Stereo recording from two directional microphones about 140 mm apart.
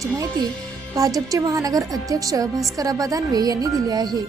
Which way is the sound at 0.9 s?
25° right (ahead or behind).